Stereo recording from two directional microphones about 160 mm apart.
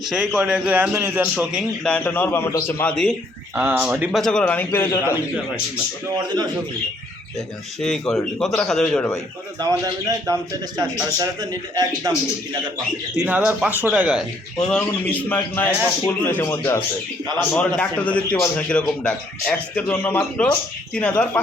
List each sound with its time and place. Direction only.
0.0 s a man's voice: centre (ahead or behind)
1.8 s speech: 10° left (ahead or behind)
2.9 s a man's voice: 5° left (ahead or behind)
3.5 s a man's voice: 10° right (ahead or behind); by 5.1 s 15° left (ahead or behind)
6.2 s a man's voice: 25° right (ahead or behind)
7.8 s a man's voice: 5° left (ahead or behind)
9.6 s a man's voice: 25° right (ahead or behind)
13.2 s a man's voice: 10° right (ahead or behind)
14.7 s speech: 5° left (ahead or behind)